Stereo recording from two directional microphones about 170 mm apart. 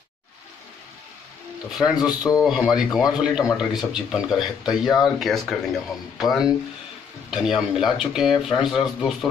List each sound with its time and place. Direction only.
1.7 s speech: centre (ahead or behind)